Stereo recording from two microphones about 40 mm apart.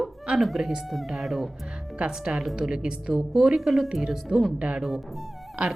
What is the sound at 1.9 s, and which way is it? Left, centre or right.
Speech, right.